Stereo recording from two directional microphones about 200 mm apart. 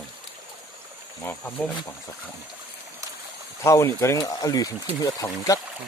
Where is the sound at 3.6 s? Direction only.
15° left (ahead or behind).